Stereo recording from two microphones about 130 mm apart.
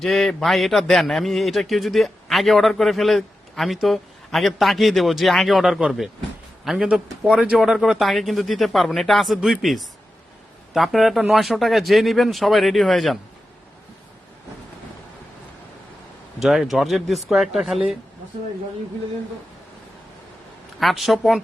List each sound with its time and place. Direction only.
0.0 s a man's voice: centre (ahead or behind)
16.4 s a man's voice: centre (ahead or behind)
20.7 s a man's voice: centre (ahead or behind)